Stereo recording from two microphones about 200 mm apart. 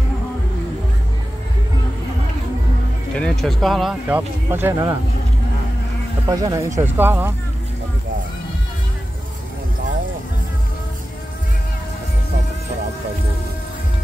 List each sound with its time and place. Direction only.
3.2 s speech: 5° left (ahead or behind); by 4.9 s 10° right (ahead or behind)
6.2 s speech: 20° right (ahead or behind)